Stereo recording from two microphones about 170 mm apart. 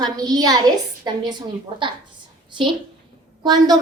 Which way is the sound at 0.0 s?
25° right (ahead or behind).